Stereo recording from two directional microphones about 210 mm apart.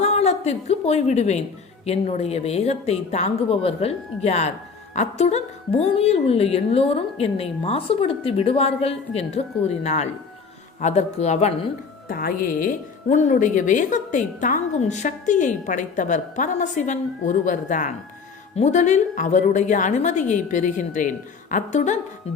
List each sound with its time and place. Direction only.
0.0 s a woman's voice: 30° left (ahead or behind)
12.0 s a woman's voice: 45° left (ahead or behind)